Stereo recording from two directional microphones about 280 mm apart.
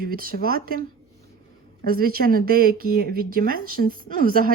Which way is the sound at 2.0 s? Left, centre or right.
Right.